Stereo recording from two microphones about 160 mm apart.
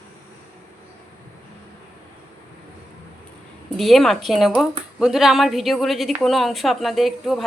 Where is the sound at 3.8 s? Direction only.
Centre (ahead or behind).